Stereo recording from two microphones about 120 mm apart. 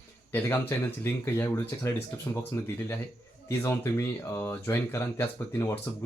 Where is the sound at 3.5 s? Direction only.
20° left (ahead or behind).